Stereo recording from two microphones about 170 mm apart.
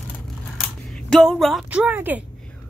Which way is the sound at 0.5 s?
Centre (ahead or behind).